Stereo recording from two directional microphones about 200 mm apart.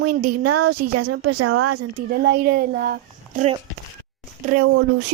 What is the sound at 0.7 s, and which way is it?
Speech, 90° right.